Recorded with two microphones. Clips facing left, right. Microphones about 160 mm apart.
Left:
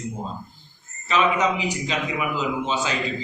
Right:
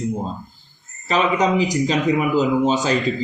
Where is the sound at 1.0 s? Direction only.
40° right (ahead or behind).